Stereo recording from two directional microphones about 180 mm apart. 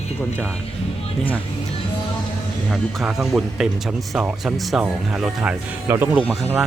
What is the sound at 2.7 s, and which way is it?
Speech, centre (ahead or behind).